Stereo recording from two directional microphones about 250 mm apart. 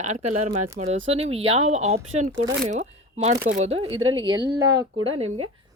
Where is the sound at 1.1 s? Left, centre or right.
Right.